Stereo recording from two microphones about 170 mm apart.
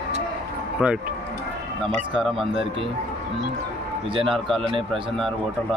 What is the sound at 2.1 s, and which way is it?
Speech, centre (ahead or behind).